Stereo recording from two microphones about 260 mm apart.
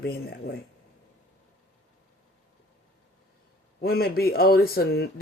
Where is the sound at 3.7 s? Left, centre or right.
Left.